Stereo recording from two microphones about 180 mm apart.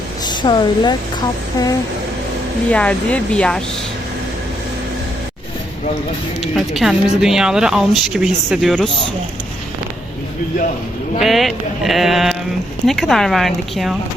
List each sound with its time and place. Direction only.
0.3 s speech: 25° left (ahead or behind)
2.6 s speech: 5° left (ahead or behind)
6.4 s speech: centre (ahead or behind)
11.2 s speech: centre (ahead or behind)